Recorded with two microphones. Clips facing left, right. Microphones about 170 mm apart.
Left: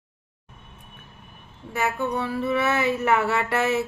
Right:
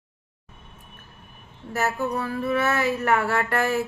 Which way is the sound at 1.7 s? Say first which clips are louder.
Even; centre (ahead or behind).